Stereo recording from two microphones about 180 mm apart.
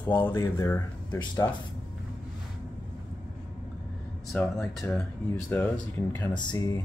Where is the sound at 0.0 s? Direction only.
10° left (ahead or behind).